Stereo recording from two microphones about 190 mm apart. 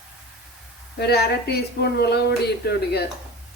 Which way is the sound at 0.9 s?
60° left (ahead or behind).